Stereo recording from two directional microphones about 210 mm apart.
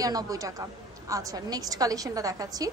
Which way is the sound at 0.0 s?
15° right (ahead or behind).